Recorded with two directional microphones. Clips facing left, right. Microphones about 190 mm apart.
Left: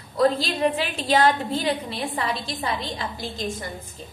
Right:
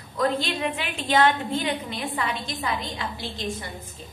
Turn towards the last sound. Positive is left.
turn(degrees=40)  # may be behind; listen again after turning